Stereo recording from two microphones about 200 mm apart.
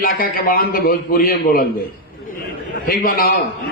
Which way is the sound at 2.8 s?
45° left (ahead or behind).